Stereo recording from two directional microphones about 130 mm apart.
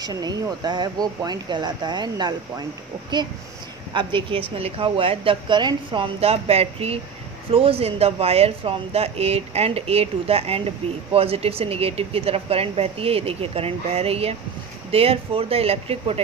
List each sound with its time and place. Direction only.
0.0 s speech: 30° right (ahead or behind)
3.9 s a woman's voice: 40° right (ahead or behind)
6.2 s a woman's voice: 50° right (ahead or behind)